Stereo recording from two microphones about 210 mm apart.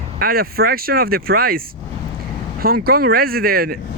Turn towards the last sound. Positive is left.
turn(degrees=-45)  # may be behind; listen again after turning